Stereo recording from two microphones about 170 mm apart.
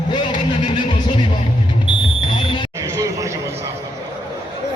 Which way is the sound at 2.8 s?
20° right (ahead or behind).